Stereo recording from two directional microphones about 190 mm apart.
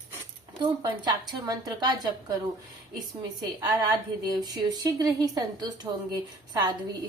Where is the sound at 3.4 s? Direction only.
20° right (ahead or behind).